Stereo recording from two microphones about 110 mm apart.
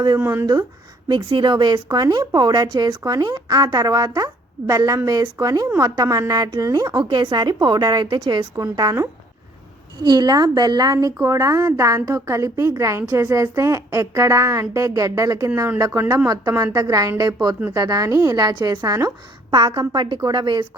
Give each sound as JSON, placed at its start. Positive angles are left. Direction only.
{"t": 0.2, "sound": "speech", "side_deg": -25}
{"t": 1.0, "sound": "a woman's voice", "side_deg": -45}
{"t": 8.5, "sound": "a woman's voice", "side_deg": -35}
{"t": 10.0, "sound": "a woman's voice", "side_deg": -40}
{"t": 19.5, "sound": "speech", "side_deg": -50}